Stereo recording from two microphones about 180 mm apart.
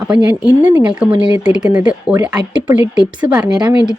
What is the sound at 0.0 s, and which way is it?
Speech, 5° right (ahead or behind).